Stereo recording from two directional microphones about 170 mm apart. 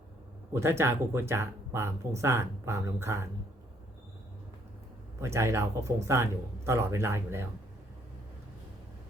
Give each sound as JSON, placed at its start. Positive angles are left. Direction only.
{"t": 0.5, "sound": "speech", "side_deg": -15}
{"t": 5.2, "sound": "speech", "side_deg": -15}